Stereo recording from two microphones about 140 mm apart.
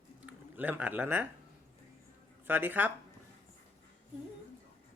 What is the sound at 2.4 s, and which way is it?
Speech, 15° right (ahead or behind).